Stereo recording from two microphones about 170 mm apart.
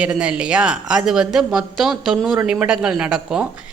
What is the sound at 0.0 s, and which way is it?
Speech, 5° right (ahead or behind).